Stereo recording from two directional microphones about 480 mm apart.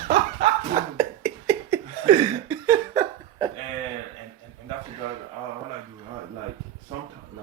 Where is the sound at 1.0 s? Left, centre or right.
Centre.